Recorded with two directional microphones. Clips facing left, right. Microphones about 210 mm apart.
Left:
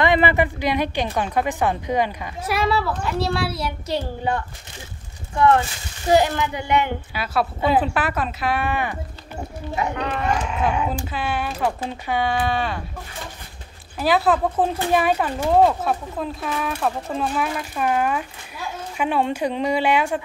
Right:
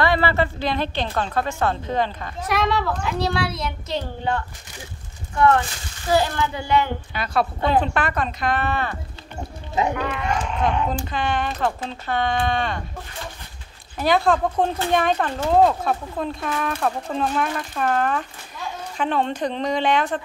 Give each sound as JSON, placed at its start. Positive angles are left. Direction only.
{"t": 0.0, "sound": "a woman's voice", "side_deg": 20}
{"t": 6.0, "sound": "a woman's voice", "side_deg": 20}
{"t": 7.2, "sound": "speech", "side_deg": 5}
{"t": 9.9, "sound": "speech", "side_deg": 35}
{"t": 10.5, "sound": "a woman's voice", "side_deg": 5}
{"t": 13.9, "sound": "a woman's voice", "side_deg": 5}